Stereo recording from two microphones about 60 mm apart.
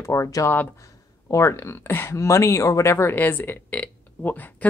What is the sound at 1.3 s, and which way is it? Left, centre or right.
Speech, left.